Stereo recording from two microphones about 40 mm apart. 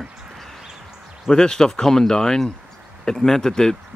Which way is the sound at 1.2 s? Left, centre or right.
Centre.